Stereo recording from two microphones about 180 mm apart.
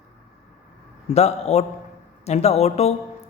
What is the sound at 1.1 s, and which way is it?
Speech, 35° left (ahead or behind).